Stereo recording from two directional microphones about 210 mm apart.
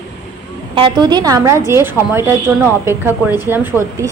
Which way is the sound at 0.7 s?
20° right (ahead or behind).